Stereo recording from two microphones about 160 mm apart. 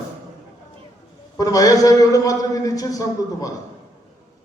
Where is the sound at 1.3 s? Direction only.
20° left (ahead or behind).